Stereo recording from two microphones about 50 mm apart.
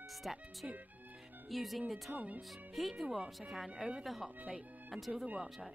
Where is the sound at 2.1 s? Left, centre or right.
Right.